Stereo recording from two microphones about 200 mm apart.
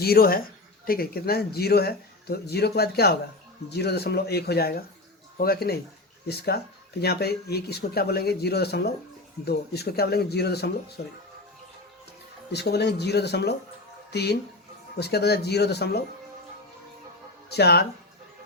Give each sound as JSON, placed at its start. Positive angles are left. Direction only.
{"t": 0.0, "sound": "speech", "side_deg": 50}
{"t": 12.5, "sound": "speech", "side_deg": 55}
{"t": 17.5, "sound": "speech", "side_deg": 55}